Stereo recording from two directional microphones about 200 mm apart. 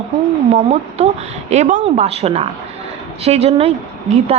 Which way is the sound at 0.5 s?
35° right (ahead or behind).